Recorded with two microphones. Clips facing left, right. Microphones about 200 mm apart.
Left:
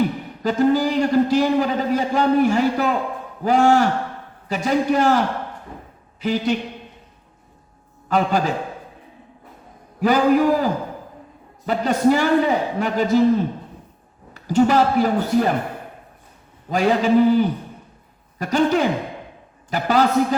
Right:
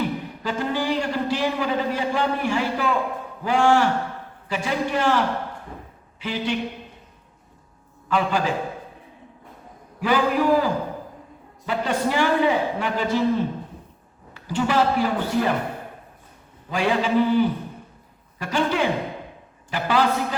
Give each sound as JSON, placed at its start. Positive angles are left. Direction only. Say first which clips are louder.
{"t": 0.0, "sound": "a man's voice", "louder": "left 5 dB", "side_deg": 40}
{"t": 8.1, "sound": "a man's voice", "louder": "left 3 dB", "side_deg": 40}
{"t": 10.0, "sound": "a man's voice", "louder": "left 5 dB", "side_deg": 40}
{"t": 14.3, "sound": "a man's voice", "louder": "left 5 dB", "side_deg": 40}
{"t": 16.6, "sound": "a man's voice", "louder": "left 4 dB", "side_deg": 40}